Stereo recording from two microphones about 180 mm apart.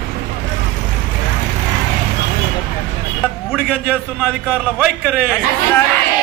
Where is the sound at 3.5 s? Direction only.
5° right (ahead or behind).